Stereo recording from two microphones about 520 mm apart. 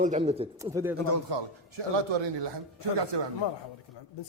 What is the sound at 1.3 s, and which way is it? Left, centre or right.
A man's voice, right.